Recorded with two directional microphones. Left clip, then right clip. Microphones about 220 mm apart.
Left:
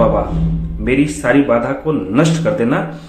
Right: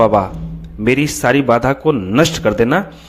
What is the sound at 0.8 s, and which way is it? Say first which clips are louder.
Speech: right 2 dB; 50° right (ahead or behind).